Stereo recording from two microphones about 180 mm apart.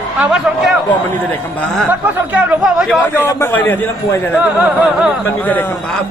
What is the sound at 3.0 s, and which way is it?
A man's voice, 10° left (ahead or behind).